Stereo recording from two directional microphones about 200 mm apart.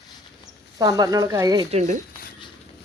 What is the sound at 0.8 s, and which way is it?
Speech, 20° right (ahead or behind).